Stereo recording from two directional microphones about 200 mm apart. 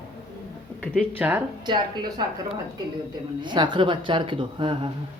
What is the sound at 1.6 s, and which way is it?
Speech, 20° right (ahead or behind).